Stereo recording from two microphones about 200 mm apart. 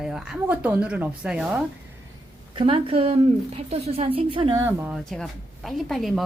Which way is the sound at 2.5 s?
25° right (ahead or behind).